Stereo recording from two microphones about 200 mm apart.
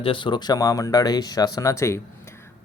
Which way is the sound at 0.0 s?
25° left (ahead or behind).